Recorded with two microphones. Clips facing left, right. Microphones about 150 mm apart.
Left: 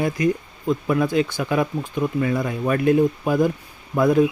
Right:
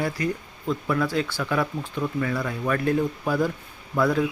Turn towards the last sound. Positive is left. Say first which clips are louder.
# left 5 dB
turn(degrees=20)  # may be behind; listen again after turning